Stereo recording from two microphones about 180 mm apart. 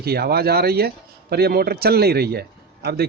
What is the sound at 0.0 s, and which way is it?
Speech, 60° right (ahead or behind).